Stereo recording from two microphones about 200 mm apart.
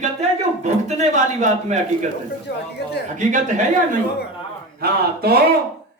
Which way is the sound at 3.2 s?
40° right (ahead or behind).